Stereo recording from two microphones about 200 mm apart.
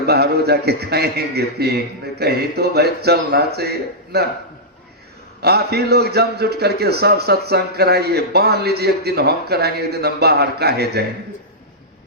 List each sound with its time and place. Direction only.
0.0 s a man's voice: 55° right (ahead or behind)
5.4 s a man's voice: 55° right (ahead or behind)